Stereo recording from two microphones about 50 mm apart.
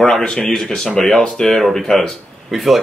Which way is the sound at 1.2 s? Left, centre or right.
Centre.